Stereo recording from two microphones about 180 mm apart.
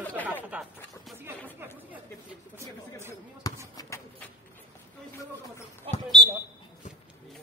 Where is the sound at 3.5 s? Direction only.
20° left (ahead or behind).